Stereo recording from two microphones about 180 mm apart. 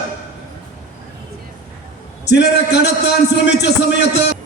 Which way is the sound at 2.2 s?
70° left (ahead or behind).